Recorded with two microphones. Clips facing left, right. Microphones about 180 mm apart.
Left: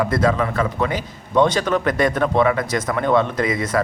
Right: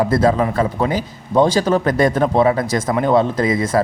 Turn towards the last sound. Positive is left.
turn(degrees=-30)  # may be behind; listen again after turning